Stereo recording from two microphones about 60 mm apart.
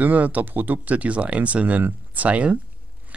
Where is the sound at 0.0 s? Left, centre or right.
Right.